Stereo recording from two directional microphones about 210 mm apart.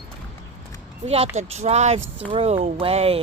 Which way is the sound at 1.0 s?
30° right (ahead or behind).